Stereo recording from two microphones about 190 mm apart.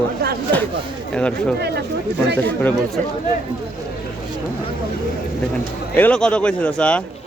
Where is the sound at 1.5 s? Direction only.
60° right (ahead or behind).